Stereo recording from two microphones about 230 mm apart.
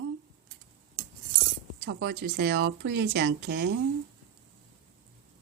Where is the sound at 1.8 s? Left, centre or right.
Right.